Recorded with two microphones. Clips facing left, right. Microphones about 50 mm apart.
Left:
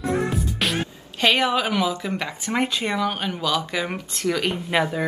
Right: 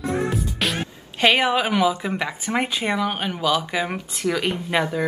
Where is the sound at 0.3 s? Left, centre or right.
Centre.